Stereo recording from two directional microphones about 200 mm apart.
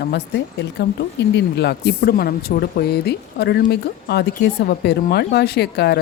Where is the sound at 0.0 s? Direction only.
55° left (ahead or behind).